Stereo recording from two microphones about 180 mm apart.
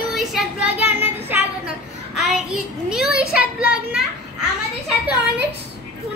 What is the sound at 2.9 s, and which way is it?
Children playing, 5° right (ahead or behind).